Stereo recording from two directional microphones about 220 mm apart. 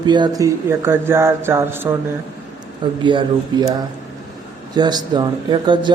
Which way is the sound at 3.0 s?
20° right (ahead or behind).